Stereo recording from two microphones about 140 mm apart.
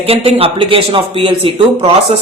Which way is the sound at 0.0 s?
45° right (ahead or behind).